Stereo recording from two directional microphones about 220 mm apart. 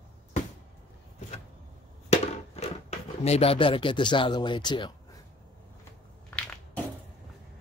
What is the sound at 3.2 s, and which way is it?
Speech, 30° left (ahead or behind).